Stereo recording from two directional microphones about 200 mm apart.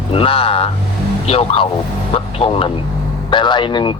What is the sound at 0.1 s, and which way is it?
Speech, 25° left (ahead or behind).